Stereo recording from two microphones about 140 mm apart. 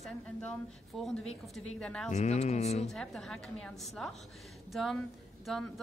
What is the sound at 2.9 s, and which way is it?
A woman's voice, centre (ahead or behind).